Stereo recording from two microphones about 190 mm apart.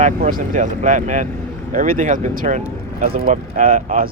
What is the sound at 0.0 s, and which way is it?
Speech, 45° right (ahead or behind).